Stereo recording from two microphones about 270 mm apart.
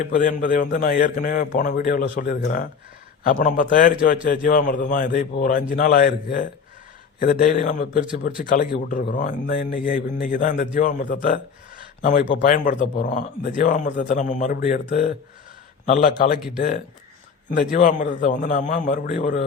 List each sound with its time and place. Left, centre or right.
0.0 s a man's voice: left
12.4 s speech: left